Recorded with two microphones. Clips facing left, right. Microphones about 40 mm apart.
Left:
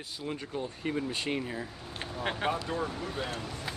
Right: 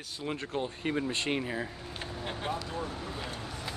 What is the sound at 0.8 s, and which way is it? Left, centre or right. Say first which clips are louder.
Speech: even; centre.